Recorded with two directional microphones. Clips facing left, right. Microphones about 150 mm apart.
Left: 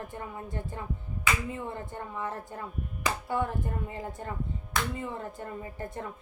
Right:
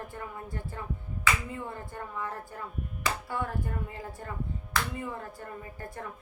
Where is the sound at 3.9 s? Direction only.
20° left (ahead or behind).